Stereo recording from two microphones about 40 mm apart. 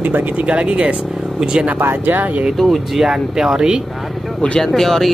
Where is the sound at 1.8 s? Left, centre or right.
Right.